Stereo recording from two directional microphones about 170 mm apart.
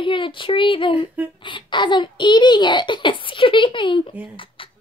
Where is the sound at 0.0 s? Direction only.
30° left (ahead or behind).